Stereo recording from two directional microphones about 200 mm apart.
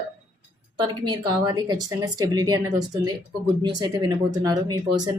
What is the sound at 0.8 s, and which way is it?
Speech, 20° right (ahead or behind).